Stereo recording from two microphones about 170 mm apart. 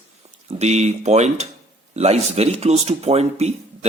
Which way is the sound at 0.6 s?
40° right (ahead or behind).